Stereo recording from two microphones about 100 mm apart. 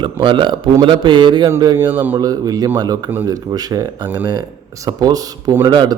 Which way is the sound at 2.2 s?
40° right (ahead or behind).